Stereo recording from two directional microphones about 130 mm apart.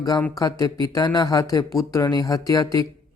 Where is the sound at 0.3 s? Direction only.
25° left (ahead or behind).